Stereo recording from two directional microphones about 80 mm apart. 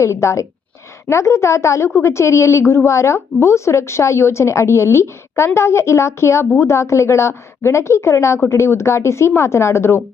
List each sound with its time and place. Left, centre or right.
0.0 s a woman's voice: left